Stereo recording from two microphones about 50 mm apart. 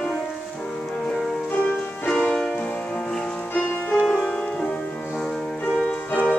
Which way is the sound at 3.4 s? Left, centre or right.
Left.